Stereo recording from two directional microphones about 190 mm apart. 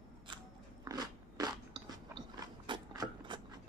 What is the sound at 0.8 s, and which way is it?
Biting, 20° right (ahead or behind).